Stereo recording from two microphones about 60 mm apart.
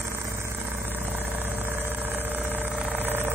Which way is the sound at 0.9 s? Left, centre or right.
Right.